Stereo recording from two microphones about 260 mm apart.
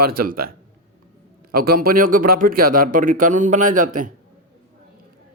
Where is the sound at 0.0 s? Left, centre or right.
Right.